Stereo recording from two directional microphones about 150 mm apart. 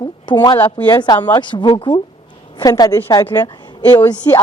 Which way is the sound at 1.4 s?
30° left (ahead or behind).